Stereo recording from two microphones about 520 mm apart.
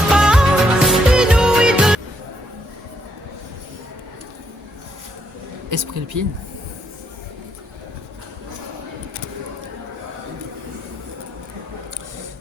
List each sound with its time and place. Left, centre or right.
0.1 s music: centre
5.7 s speech: right